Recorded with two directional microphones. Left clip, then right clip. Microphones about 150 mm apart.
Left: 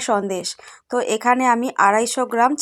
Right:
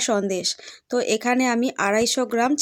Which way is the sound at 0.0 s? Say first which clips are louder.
Left 2 dB; 30° right (ahead or behind).